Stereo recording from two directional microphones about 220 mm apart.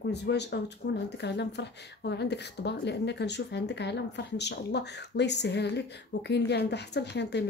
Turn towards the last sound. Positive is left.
turn(degrees=50)  # may be behind; listen again after turning